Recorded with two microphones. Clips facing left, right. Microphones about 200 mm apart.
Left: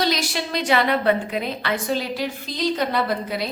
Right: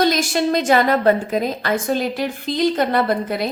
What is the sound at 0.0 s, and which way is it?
A woman's voice, 50° right (ahead or behind).